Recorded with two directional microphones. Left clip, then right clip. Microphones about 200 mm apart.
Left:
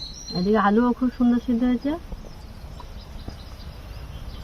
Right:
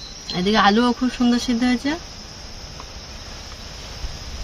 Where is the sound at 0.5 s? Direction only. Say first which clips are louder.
Right 4 dB; 10° right (ahead or behind).